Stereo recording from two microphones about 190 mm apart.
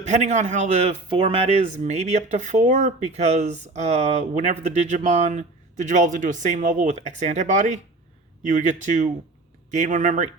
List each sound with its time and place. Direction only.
0.0 s speech: 40° right (ahead or behind)